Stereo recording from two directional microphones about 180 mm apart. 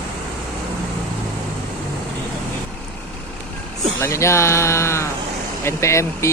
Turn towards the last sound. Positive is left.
turn(degrees=15)  # may be behind; listen again after turning